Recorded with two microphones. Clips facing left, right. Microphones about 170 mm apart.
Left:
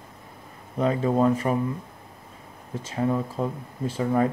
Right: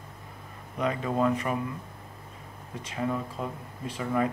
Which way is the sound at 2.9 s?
30° left (ahead or behind).